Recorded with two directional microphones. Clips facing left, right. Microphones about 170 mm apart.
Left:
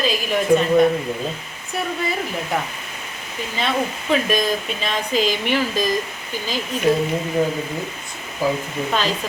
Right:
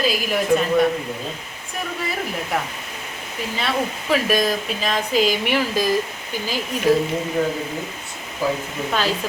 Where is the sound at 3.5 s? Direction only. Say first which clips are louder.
Left 2 dB; 5° right (ahead or behind).